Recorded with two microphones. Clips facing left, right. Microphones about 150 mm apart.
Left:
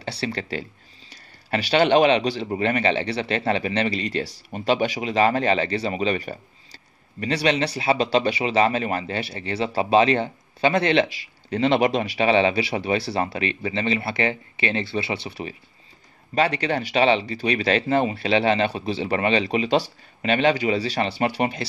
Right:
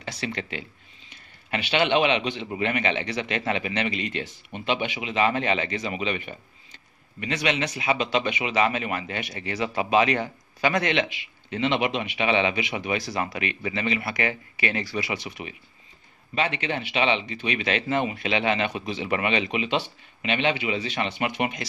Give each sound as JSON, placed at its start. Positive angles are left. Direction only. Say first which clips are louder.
{"t": 0.0, "sound": "a man's voice", "louder": "left 4 dB", "side_deg": 35}